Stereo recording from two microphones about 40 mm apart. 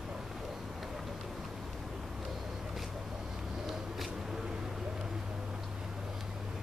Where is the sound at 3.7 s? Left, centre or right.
Centre.